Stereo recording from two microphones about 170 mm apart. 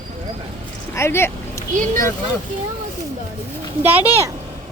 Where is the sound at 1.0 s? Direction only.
15° left (ahead or behind).